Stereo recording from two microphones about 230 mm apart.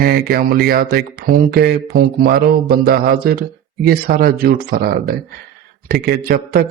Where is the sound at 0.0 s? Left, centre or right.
Right.